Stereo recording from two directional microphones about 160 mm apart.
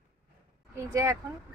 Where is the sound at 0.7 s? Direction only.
20° right (ahead or behind).